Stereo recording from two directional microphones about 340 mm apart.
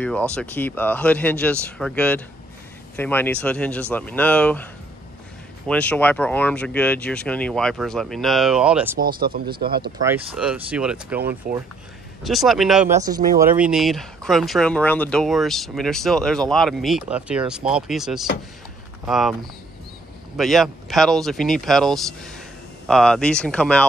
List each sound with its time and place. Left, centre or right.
0.3 s speech: centre
5.7 s speech: centre
8.9 s speech: right
10.0 s speech: centre
20.3 s speech: centre